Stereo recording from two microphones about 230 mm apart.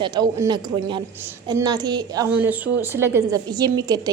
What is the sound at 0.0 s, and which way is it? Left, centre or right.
A woman's voice, centre.